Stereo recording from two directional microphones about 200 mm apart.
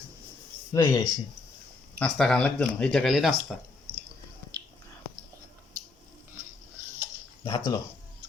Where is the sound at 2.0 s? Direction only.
5° left (ahead or behind).